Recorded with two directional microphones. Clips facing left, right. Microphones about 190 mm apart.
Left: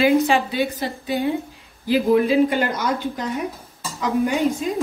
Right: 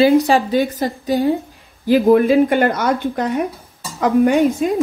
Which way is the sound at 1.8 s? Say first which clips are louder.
Right 5 dB; 50° right (ahead or behind).